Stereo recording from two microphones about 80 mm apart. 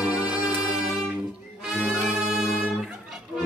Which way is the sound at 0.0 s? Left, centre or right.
Centre.